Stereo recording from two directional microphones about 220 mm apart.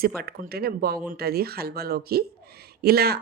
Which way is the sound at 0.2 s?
45° right (ahead or behind).